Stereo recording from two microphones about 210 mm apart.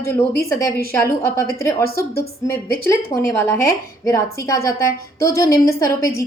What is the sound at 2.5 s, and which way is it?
A woman's voice, 15° left (ahead or behind).